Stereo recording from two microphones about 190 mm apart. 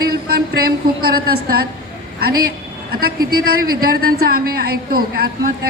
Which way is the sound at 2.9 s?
50° right (ahead or behind).